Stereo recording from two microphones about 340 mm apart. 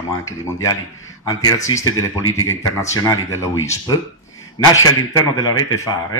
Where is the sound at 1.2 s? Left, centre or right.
Centre.